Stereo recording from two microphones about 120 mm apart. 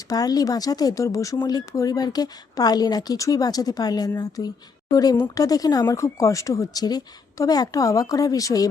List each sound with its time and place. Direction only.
0.1 s a woman's voice: 30° left (ahead or behind)